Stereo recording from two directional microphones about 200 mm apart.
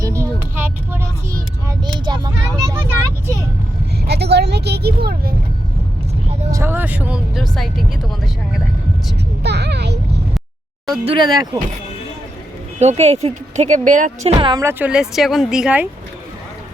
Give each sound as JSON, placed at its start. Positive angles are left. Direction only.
{"t": 0.0, "sound": "vehicle", "side_deg": -15}
{"t": 1.6, "sound": "vehicle", "side_deg": -20}
{"t": 4.0, "sound": "vehicle", "side_deg": -55}
{"t": 6.5, "sound": "speech", "side_deg": -10}
{"t": 9.4, "sound": "a child's voice", "side_deg": -55}
{"t": 11.0, "sound": "speech", "side_deg": -25}
{"t": 12.8, "sound": "speech", "side_deg": -30}
{"t": 14.3, "sound": "speech", "side_deg": -20}